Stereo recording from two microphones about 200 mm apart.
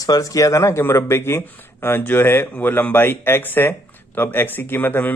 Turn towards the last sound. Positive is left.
turn(degrees=10)  # may be behind; listen again after turning